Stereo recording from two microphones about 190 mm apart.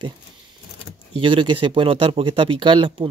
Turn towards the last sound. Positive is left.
turn(degrees=-25)  # may be behind; listen again after turning